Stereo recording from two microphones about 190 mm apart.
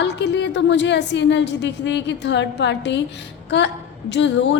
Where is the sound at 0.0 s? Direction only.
65° left (ahead or behind).